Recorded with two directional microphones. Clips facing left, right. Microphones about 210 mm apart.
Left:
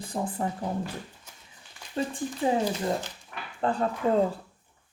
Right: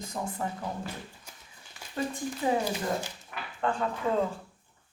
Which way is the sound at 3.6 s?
35° left (ahead or behind).